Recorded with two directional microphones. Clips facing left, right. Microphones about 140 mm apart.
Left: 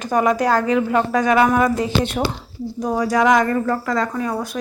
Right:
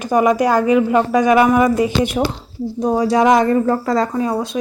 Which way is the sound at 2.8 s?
25° right (ahead or behind).